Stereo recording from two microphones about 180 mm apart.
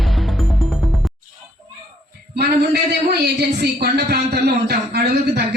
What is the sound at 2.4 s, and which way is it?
Speech, 60° right (ahead or behind).